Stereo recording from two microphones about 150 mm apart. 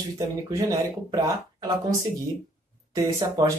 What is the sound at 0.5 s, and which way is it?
Speech, 20° right (ahead or behind).